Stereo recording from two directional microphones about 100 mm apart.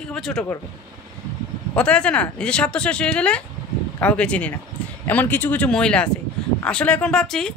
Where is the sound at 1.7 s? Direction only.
10° left (ahead or behind).